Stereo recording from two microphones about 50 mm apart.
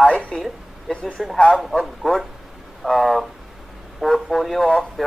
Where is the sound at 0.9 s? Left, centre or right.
Left.